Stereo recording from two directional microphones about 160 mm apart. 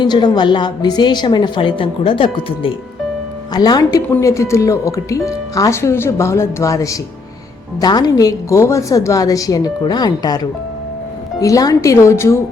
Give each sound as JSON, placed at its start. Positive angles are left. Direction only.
{"t": 0.0, "sound": "speech", "side_deg": 25}